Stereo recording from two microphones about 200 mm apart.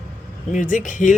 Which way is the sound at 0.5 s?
40° left (ahead or behind).